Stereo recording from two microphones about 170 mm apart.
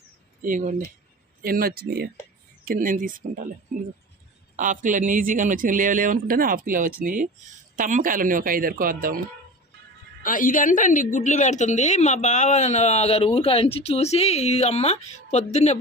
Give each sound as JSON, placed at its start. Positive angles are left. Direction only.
{"t": 0.4, "sound": "speech", "side_deg": -50}
{"t": 1.4, "sound": "speech", "side_deg": -60}
{"t": 2.6, "sound": "speech", "side_deg": -50}
{"t": 4.5, "sound": "speech", "side_deg": -50}
{"t": 10.2, "sound": "a woman's voice", "side_deg": 50}